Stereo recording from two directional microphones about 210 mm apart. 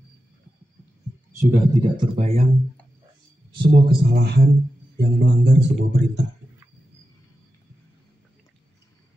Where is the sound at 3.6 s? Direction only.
50° right (ahead or behind).